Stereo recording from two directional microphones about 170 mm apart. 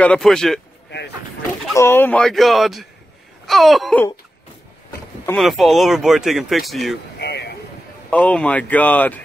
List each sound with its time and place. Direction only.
0.0 s speech: 5° left (ahead or behind)
0.8 s a sound: 85° left
1.8 s speech: 15° left (ahead or behind)
5.4 s speech: centre (ahead or behind)
7.2 s a sound: 75° left (ahead or behind)
8.1 s speech: 5° left (ahead or behind)